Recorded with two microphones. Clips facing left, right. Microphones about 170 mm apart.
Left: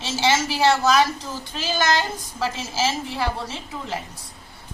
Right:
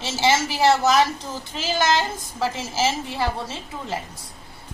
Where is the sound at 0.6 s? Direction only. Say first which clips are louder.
Right 1 dB; 25° right (ahead or behind).